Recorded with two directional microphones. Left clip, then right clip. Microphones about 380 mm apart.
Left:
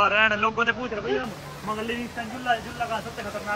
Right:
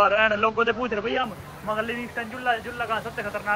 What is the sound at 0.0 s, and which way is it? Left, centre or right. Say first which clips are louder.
Speech: right 1 dB; centre.